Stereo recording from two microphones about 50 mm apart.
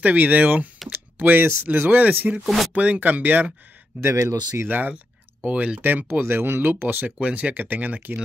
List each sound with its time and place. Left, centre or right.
0.0 s speech: right
2.4 s speech: centre
2.7 s speech: right
4.2 s speech: right
4.6 s speech: right
6.2 s speech: right
7.1 s speech: right